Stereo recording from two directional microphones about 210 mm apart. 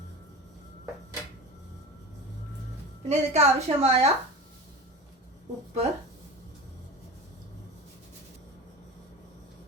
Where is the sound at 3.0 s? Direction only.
30° right (ahead or behind).